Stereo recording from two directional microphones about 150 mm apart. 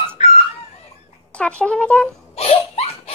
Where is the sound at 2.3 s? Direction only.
45° left (ahead or behind).